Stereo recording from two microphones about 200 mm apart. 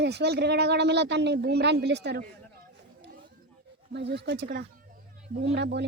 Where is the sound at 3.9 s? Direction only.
60° right (ahead or behind).